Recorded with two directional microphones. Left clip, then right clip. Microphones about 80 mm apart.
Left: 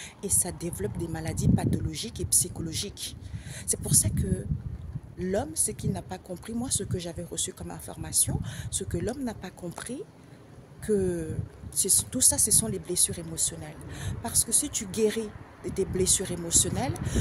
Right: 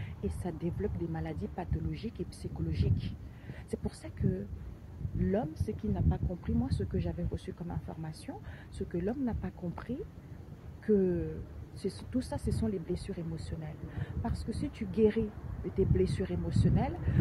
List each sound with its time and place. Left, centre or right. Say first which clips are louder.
0.2 s speech: left 5 dB; left
5.2 s speech: left 4 dB; left
12.6 s speech: left 5 dB; left